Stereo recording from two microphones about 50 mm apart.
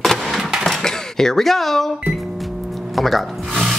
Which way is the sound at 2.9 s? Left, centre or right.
Centre.